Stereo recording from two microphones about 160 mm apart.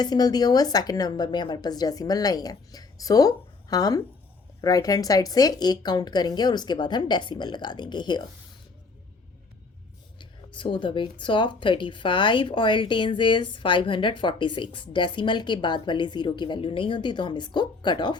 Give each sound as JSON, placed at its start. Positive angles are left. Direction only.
{"t": 0.0, "sound": "a woman's voice", "side_deg": 25}
{"t": 10.2, "sound": "speech", "side_deg": 30}